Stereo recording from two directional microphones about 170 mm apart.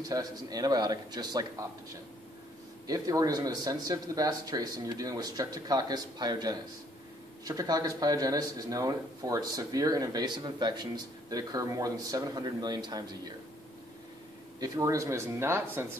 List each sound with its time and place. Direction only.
0.0 s speech: 20° right (ahead or behind)
2.9 s speech: 20° right (ahead or behind)
14.6 s speech: 20° right (ahead or behind)